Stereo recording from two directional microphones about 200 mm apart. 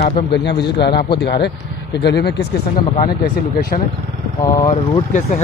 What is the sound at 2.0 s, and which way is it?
Speech, 55° left (ahead or behind).